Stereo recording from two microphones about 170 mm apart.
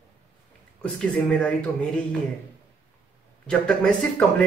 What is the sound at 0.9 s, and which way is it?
Speech, 10° left (ahead or behind).